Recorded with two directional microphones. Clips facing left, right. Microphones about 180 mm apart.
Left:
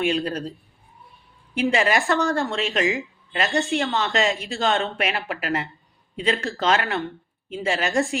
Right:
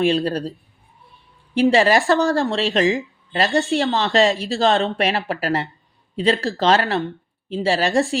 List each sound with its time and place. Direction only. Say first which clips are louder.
0.0 s a woman's voice: right 5 dB; 35° right (ahead or behind)
1.5 s a woman's voice: right 6 dB; 35° right (ahead or behind)